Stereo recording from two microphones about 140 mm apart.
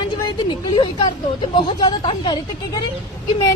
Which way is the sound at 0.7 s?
35° left (ahead or behind).